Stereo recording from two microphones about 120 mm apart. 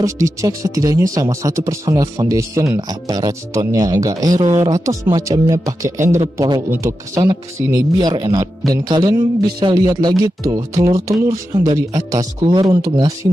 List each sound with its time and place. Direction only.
0.0 s speech: 25° right (ahead or behind)